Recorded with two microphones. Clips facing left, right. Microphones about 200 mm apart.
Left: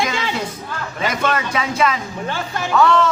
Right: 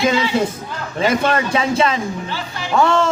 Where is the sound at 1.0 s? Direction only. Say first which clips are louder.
Right 4 dB; 30° right (ahead or behind).